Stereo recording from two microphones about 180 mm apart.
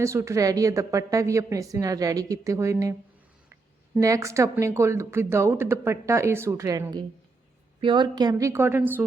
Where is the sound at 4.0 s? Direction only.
15° right (ahead or behind).